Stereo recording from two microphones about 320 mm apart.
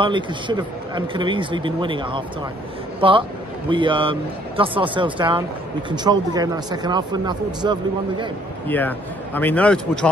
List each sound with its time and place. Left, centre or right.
0.0 s speech: centre
8.6 s a man's voice: centre